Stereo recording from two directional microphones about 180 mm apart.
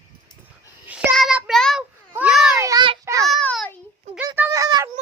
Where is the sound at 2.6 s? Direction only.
20° right (ahead or behind).